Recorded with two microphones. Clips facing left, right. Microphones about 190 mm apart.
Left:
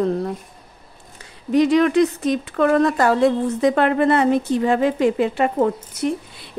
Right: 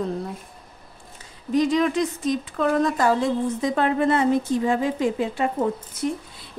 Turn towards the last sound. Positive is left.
turn(degrees=70)  # may be behind; listen again after turning